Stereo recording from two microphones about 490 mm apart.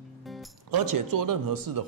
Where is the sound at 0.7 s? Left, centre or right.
Right.